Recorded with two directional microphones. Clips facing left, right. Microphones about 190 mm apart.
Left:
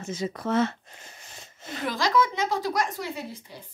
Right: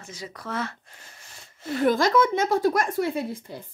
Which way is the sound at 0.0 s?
25° left (ahead or behind).